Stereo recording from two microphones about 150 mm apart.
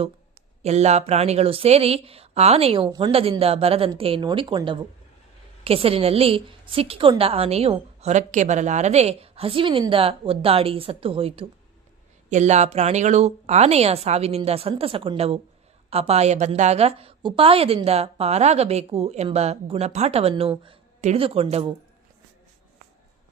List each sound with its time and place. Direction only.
0.6 s speech: 45° right (ahead or behind); by 3.1 s 30° right (ahead or behind)
3.1 s a woman's voice: 40° right (ahead or behind)
12.3 s a woman's voice: 50° right (ahead or behind)